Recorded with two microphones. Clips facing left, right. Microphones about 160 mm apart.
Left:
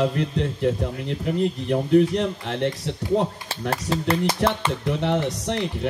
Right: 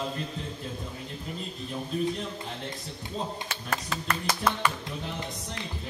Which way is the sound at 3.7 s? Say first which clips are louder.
Left 9 dB; 30° left (ahead or behind).